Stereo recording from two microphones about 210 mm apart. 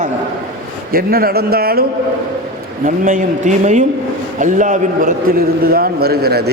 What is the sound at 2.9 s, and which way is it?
A man's voice, 40° right (ahead or behind).